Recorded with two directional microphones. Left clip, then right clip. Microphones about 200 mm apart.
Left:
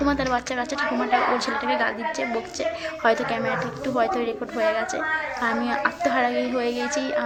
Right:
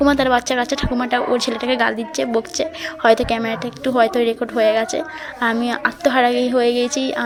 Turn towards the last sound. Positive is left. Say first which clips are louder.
# right 5 dB
turn(degrees=-30)  # may be behind; listen again after turning